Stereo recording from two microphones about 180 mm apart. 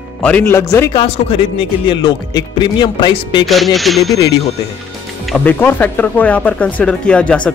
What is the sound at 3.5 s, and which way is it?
Speech, centre (ahead or behind).